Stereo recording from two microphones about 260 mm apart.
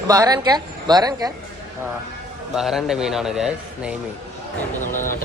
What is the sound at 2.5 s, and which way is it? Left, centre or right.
A man's voice, centre.